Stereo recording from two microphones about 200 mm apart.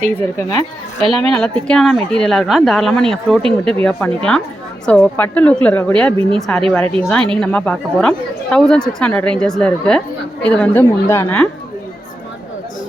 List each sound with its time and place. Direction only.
0.2 s a woman's voice: 10° left (ahead or behind)
1.0 s a woman's voice: 30° right (ahead or behind)
1.6 s a woman's voice: centre (ahead or behind)